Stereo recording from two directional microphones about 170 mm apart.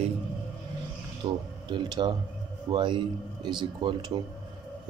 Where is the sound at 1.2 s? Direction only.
25° right (ahead or behind).